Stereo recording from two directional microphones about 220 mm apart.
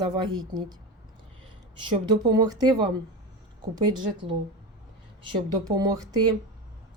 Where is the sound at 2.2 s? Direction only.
20° right (ahead or behind).